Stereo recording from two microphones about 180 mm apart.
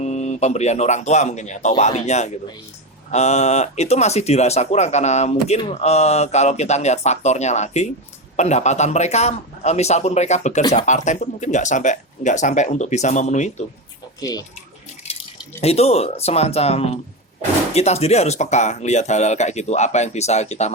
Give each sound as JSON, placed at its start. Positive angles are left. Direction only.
{"t": 0.0, "sound": "speech", "side_deg": 40}
{"t": 14.2, "sound": "speech", "side_deg": 20}
{"t": 15.6, "sound": "speech", "side_deg": 35}